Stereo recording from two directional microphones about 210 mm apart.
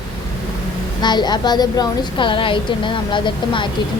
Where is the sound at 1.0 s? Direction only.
20° left (ahead or behind).